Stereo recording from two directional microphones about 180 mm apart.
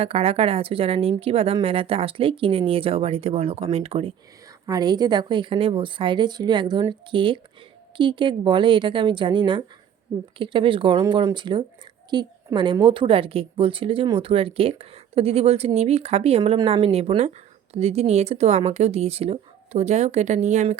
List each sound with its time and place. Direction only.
0.0 s a woman's voice: 35° right (ahead or behind)
4.6 s a woman's voice: 20° right (ahead or behind); by 20.7 s 40° right (ahead or behind)